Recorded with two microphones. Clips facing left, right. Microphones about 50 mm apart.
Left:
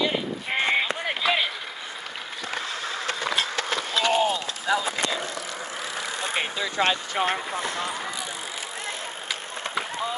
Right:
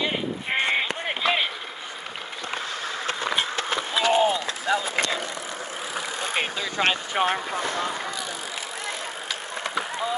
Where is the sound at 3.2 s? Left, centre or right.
Centre.